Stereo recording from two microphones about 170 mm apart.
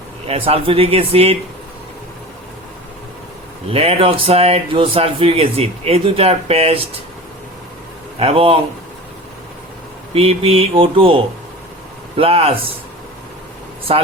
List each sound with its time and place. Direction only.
0.3 s speech: 35° right (ahead or behind)
3.7 s speech: 35° right (ahead or behind)
8.2 s speech: 35° right (ahead or behind)
10.2 s speech: 35° right (ahead or behind)
13.9 s speech: 35° right (ahead or behind)